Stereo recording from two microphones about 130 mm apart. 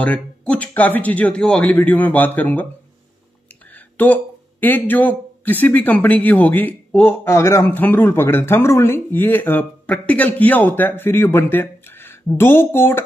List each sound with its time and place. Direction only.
0.0 s speech: 10° left (ahead or behind)
3.7 s speech: 15° left (ahead or behind)